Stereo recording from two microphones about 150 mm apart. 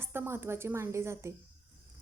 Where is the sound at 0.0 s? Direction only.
15° right (ahead or behind).